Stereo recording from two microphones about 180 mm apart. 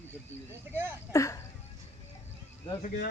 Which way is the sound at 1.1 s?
15° left (ahead or behind).